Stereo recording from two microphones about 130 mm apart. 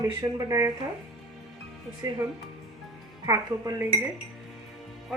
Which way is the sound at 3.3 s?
25° right (ahead or behind).